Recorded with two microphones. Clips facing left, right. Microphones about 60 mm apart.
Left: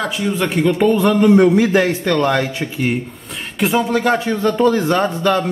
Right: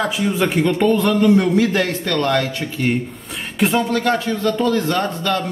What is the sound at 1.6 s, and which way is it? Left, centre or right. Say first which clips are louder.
A man's voice: left 3 dB; centre.